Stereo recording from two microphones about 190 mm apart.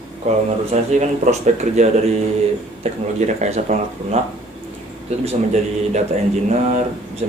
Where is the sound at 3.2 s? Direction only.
35° right (ahead or behind).